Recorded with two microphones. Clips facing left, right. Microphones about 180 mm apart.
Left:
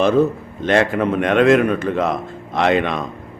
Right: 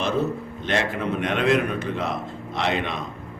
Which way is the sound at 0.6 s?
60° left (ahead or behind).